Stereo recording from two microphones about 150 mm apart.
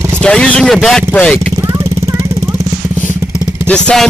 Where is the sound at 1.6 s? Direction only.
20° right (ahead or behind).